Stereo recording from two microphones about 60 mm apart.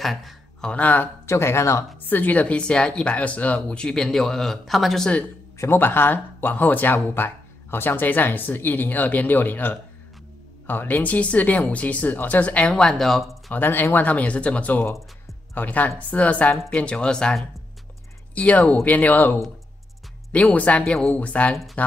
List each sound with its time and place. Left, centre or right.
0.0 s speech: centre
0.6 s speech: left
1.2 s speech: left
2.0 s speech: left
3.5 s speech: centre
5.6 s speech: left
12.7 s speech: centre
13.5 s speech: left
13.9 s speech: left
20.5 s speech: left